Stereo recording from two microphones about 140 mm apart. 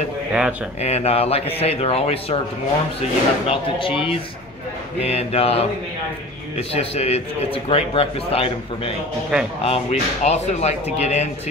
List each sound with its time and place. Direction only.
0.3 s speech: 5° right (ahead or behind)
0.8 s a man's voice: 50° left (ahead or behind)
3.4 s a man's voice: 40° left (ahead or behind)
6.7 s a man's voice: 45° left (ahead or behind)
9.3 s speech: 5° right (ahead or behind)
9.7 s a man's voice: 50° left (ahead or behind)